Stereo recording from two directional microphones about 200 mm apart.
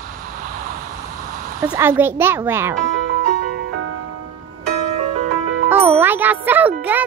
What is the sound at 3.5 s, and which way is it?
Music, 90° right.